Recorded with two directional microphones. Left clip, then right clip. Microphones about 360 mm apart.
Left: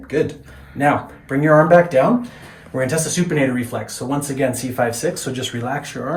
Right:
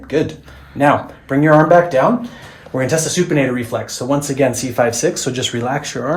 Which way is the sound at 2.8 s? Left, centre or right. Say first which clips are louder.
Right 4 dB; centre.